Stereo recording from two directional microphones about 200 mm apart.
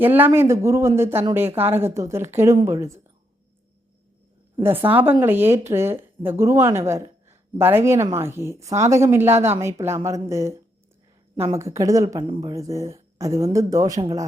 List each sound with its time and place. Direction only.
0.0 s a woman's voice: 10° right (ahead or behind)
4.6 s a woman's voice: 10° right (ahead or behind)